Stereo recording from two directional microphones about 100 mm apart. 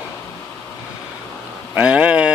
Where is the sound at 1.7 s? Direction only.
15° right (ahead or behind).